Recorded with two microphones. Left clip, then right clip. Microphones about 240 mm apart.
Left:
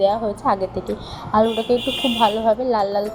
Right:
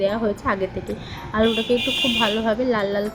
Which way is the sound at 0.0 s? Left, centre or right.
Centre.